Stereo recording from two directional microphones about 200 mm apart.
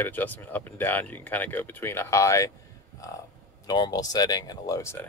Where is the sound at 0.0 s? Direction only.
10° left (ahead or behind).